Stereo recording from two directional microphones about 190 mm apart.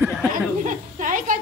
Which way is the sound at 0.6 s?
45° right (ahead or behind).